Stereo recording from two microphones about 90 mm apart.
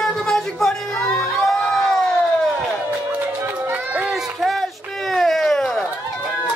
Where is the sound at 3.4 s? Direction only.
20° right (ahead or behind).